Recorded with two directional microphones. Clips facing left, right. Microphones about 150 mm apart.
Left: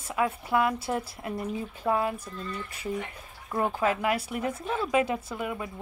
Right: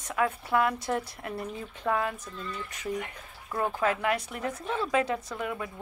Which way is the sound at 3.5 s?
15° left (ahead or behind).